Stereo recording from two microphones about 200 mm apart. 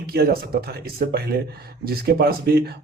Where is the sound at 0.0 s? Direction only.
50° right (ahead or behind).